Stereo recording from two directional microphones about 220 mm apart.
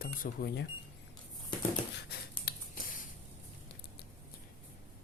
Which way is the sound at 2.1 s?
45° left (ahead or behind).